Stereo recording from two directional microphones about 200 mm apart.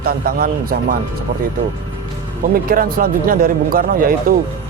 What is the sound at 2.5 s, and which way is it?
A man's voice, 45° right (ahead or behind).